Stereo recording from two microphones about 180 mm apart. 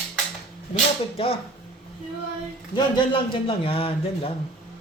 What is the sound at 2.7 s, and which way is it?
A man's voice, 25° left (ahead or behind).